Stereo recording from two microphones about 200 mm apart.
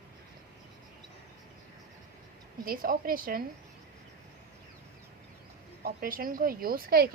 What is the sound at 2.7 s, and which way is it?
Speech, 45° right (ahead or behind).